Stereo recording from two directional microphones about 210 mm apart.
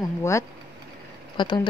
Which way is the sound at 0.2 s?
15° left (ahead or behind).